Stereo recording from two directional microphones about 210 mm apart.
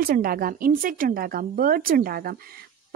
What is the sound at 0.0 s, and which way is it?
Speech, 45° right (ahead or behind).